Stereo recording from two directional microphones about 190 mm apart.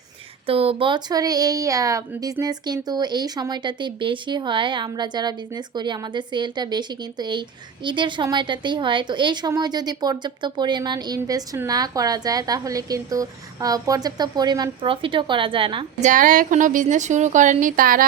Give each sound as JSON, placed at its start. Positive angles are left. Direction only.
{"t": 0.4, "sound": "a woman's voice", "side_deg": -30}
{"t": 16.0, "sound": "a woman's voice", "side_deg": -40}